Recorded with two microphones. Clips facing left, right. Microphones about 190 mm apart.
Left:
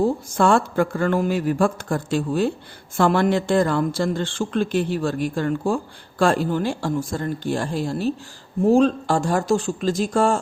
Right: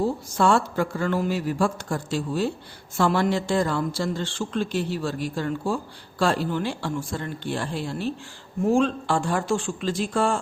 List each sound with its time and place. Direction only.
0.0 s a man's voice: 55° left (ahead or behind)